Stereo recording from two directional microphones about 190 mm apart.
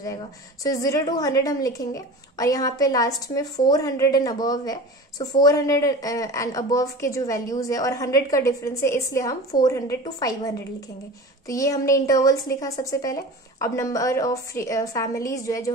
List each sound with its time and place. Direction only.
0.7 s a woman's voice: 20° left (ahead or behind)
11.4 s a woman's voice: 15° left (ahead or behind)